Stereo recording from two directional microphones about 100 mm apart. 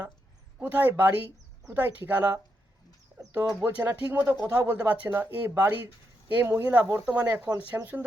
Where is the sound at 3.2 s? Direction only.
20° right (ahead or behind).